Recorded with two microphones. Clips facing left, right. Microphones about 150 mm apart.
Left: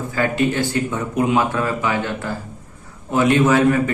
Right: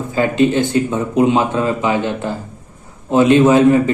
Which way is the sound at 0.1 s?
20° right (ahead or behind).